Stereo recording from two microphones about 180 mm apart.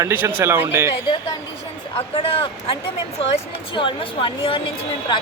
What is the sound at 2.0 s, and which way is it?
A woman's voice, 30° left (ahead or behind).